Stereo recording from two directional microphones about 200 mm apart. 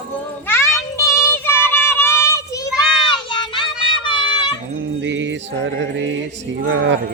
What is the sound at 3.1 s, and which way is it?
Child singing, 25° left (ahead or behind).